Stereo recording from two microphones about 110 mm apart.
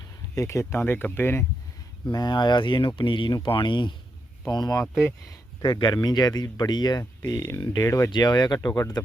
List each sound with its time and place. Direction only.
0.3 s speech: 25° left (ahead or behind)
2.0 s speech: 40° left (ahead or behind)
4.8 s speech: 25° left (ahead or behind)
5.6 s speech: 40° left (ahead or behind)
7.0 s speech: 25° left (ahead or behind)
8.1 s speech: 40° left (ahead or behind)